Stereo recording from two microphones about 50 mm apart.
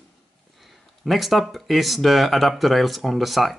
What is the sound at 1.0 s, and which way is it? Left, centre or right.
Speech, centre.